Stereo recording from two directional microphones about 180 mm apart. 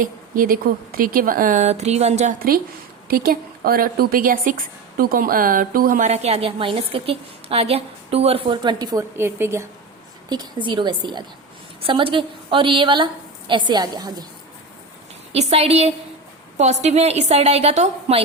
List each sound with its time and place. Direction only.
0.0 s speech: 50° right (ahead or behind)
3.1 s a woman's voice: 55° right (ahead or behind); by 14.3 s 25° right (ahead or behind)
15.3 s a woman's voice: 35° right (ahead or behind)